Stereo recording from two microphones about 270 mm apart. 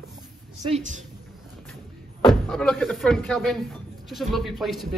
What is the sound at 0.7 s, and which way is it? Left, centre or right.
Speech, right.